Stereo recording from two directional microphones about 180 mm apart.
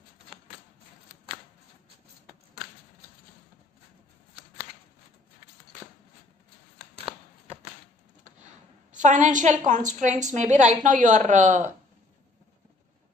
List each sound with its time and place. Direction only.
8.9 s a woman's voice: 45° right (ahead or behind)